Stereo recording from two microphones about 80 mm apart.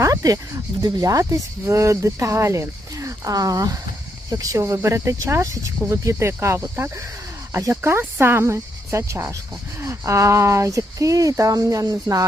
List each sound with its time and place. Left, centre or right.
0.0 s speech: right
4.6 s speech: right
7.7 s speech: right